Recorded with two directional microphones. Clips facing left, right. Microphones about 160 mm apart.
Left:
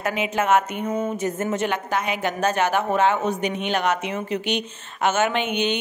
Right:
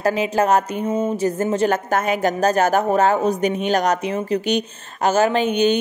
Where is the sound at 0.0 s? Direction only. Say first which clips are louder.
Right 5 dB; 35° right (ahead or behind).